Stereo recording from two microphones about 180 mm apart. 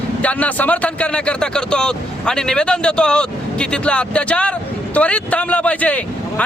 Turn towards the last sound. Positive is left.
turn(degrees=5)  # may be behind; listen again after turning